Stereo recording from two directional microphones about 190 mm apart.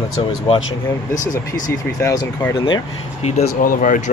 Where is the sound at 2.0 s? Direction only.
15° left (ahead or behind).